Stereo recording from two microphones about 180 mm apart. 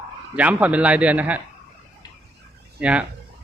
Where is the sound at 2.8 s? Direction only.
5° right (ahead or behind).